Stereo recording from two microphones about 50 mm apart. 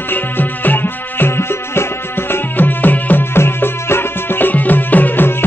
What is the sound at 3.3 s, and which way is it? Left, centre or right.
Music, left.